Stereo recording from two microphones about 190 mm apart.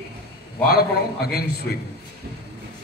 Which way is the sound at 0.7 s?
55° left (ahead or behind).